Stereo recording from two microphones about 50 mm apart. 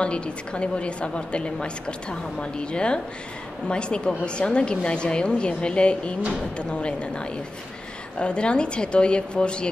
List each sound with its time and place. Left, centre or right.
0.0 s a woman's voice: left